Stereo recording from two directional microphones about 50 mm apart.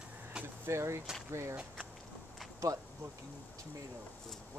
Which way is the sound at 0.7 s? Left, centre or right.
Right.